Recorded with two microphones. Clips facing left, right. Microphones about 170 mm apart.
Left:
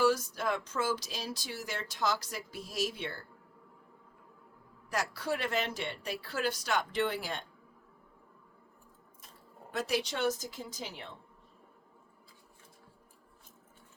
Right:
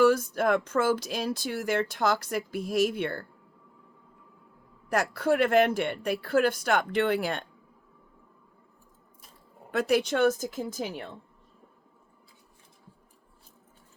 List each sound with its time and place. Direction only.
0.0 s speech: 55° right (ahead or behind)
4.9 s speech: 55° right (ahead or behind)
9.7 s speech: 55° right (ahead or behind)